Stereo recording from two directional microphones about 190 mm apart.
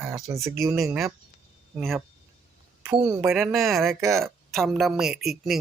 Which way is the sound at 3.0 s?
20° right (ahead or behind).